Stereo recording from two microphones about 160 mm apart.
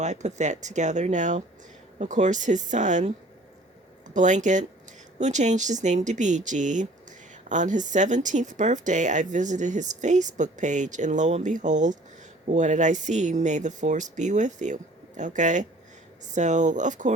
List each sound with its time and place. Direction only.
0.0 s speech: 45° right (ahead or behind)